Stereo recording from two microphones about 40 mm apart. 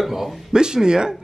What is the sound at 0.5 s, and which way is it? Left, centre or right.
Speech, centre.